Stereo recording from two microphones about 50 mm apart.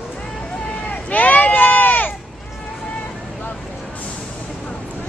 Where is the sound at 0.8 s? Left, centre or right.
Left.